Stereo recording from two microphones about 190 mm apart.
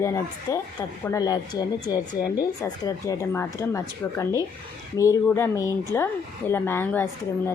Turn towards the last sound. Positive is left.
turn(degrees=15)  # may be behind; listen again after turning